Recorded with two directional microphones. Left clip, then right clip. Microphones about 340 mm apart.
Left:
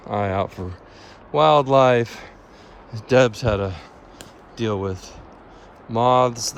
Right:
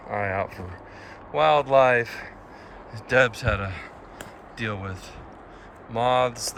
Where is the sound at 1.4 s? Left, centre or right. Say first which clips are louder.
Left 3 dB; centre.